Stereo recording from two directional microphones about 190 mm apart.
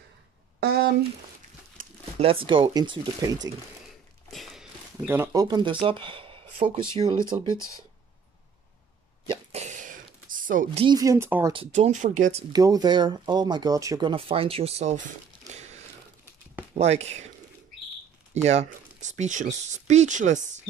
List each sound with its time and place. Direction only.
0.6 s a sound: 55° right (ahead or behind)
1.8 s a sound: 45° right (ahead or behind)
2.1 s speech: 30° right (ahead or behind)
4.3 s a sound: centre (ahead or behind)
5.0 s speech: 10° right (ahead or behind)
7.5 s speech: centre (ahead or behind)
9.3 s a sound: 35° right (ahead or behind)
10.8 s speech: 20° right (ahead or behind)
11.5 s speech: 30° right (ahead or behind)
12.5 s speech: 20° right (ahead or behind); by 15.0 s 35° right (ahead or behind)
16.7 s speech: 35° right (ahead or behind)
18.3 s speech: 35° right (ahead or behind)